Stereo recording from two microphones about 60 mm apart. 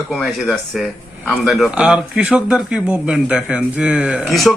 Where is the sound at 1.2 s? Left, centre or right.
Centre.